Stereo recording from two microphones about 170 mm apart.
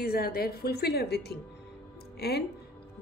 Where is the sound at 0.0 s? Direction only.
65° left (ahead or behind).